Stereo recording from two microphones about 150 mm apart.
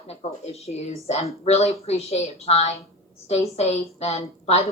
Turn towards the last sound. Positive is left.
turn(degrees=45)  # may be behind; listen again after turning